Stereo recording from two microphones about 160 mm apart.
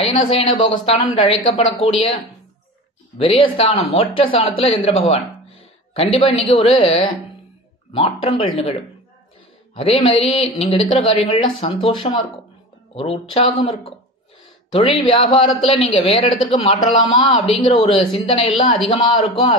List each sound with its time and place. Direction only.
0.0 s speech: 40° left (ahead or behind)
3.2 s speech: 35° left (ahead or behind)
14.7 s speech: 35° left (ahead or behind)
17.7 s speech: 35° left (ahead or behind)